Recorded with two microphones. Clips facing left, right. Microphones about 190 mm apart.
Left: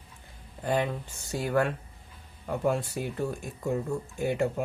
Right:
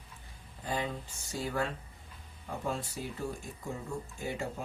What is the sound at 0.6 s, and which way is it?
Speech, 65° left (ahead or behind).